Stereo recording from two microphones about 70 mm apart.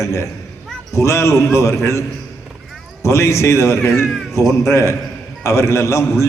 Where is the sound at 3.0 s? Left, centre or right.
Left.